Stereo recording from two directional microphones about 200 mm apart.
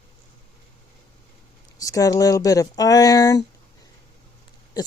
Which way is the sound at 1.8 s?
15° left (ahead or behind).